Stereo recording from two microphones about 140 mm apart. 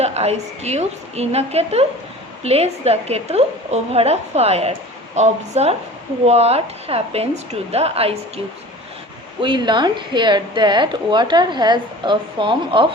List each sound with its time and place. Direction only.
0.0 s a woman's voice: 50° right (ahead or behind)
9.4 s speech: 35° right (ahead or behind)